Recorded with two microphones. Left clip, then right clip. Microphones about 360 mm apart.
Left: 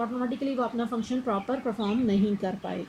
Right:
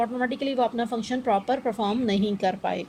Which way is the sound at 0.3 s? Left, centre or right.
Right.